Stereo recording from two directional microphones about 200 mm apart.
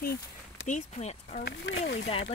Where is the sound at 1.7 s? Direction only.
60° left (ahead or behind).